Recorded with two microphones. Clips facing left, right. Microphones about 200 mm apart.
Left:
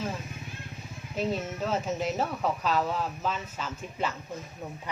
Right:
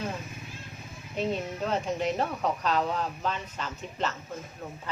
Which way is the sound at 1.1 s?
5° left (ahead or behind).